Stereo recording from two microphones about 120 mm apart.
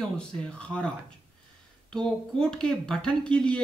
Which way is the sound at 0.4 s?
10° left (ahead or behind).